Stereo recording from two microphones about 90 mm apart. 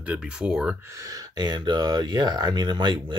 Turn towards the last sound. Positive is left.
turn(degrees=-55)  # may be behind; listen again after turning